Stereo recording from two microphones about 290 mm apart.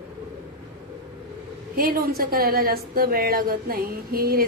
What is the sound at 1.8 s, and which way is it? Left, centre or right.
A woman's voice, right.